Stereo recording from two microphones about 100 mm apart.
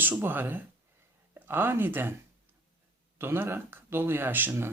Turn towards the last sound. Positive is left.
turn(degrees=-20)  # may be behind; listen again after turning